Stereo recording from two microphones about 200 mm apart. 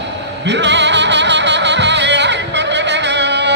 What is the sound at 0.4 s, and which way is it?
Music, 60° right (ahead or behind).